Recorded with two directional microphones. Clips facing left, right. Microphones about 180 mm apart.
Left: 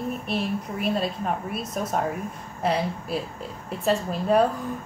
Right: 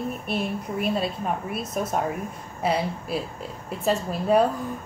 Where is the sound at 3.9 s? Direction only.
5° right (ahead or behind).